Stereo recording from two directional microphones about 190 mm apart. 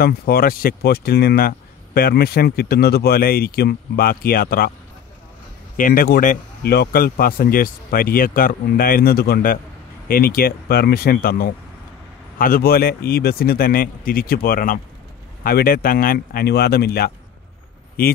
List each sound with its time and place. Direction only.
0.0 s speech: 55° left (ahead or behind)
5.8 s speech: 45° left (ahead or behind)